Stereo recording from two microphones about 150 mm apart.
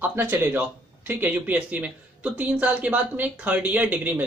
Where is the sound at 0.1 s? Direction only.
15° right (ahead or behind).